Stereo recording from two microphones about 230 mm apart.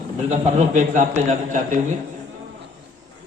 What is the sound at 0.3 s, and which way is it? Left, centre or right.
A man's voice, right.